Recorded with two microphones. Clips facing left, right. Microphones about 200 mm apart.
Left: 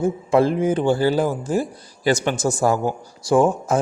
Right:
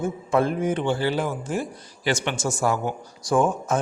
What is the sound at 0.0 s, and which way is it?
Speech, 30° left (ahead or behind).